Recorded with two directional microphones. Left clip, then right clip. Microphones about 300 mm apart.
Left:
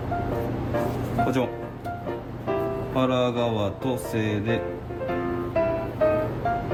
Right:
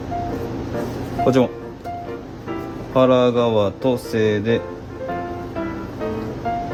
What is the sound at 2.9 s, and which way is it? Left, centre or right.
Music, right.